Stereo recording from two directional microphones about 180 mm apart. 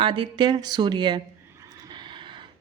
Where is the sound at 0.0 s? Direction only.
30° right (ahead or behind).